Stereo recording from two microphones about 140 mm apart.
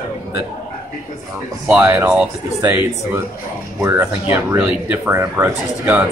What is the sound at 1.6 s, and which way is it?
Speech, 15° right (ahead or behind).